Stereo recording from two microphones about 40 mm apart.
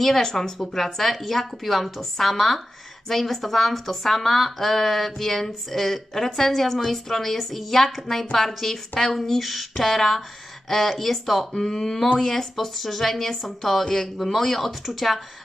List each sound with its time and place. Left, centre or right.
0.0 s speech: centre
11.5 s speech: centre